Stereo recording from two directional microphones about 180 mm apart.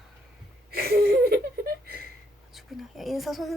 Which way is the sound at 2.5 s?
Centre (ahead or behind).